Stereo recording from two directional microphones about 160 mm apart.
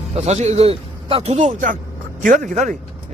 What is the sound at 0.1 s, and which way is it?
A man's voice, 45° right (ahead or behind).